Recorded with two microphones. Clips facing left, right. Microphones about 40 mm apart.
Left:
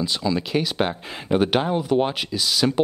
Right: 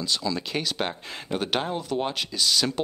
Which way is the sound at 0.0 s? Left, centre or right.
Centre.